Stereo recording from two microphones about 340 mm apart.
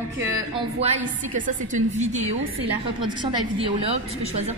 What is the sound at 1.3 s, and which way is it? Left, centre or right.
A woman's voice, right.